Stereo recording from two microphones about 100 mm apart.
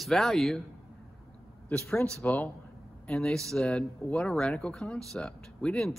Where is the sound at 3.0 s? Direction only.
5° left (ahead or behind).